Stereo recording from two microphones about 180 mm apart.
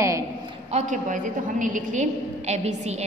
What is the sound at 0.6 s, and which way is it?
A woman's voice, 40° right (ahead or behind).